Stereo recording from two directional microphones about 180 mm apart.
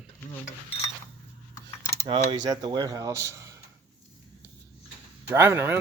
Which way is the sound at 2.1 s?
25° right (ahead or behind).